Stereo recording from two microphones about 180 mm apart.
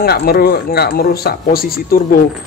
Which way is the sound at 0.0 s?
60° left (ahead or behind).